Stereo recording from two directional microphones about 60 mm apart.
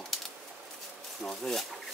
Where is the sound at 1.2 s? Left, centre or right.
Centre.